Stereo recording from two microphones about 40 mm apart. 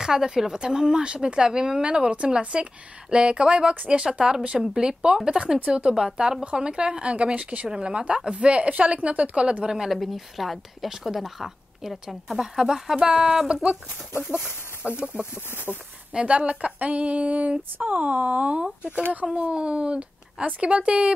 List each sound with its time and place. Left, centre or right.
0.0 s speech: centre; by 9.7 s right
9.8 s speech: centre
12.4 s speech: centre; by 17.6 s right
17.7 s speech: right
19.3 s speech: right